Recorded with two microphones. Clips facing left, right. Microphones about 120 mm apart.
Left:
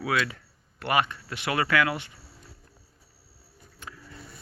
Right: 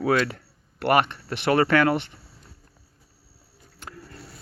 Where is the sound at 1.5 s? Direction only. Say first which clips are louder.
Right 6 dB; 35° right (ahead or behind).